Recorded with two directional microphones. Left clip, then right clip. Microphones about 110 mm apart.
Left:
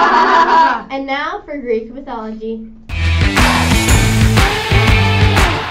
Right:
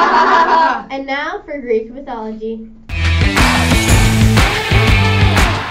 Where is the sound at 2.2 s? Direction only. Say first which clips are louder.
Right 1 dB; 20° right (ahead or behind).